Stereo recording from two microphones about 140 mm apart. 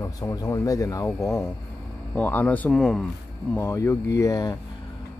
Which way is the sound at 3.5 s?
20° left (ahead or behind).